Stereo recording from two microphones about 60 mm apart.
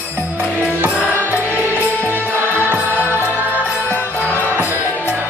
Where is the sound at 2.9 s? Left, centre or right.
Left.